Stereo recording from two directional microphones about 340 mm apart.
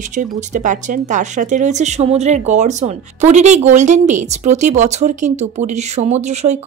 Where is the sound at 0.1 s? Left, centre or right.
Right.